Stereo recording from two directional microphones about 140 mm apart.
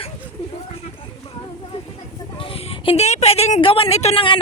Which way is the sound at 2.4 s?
45° left (ahead or behind).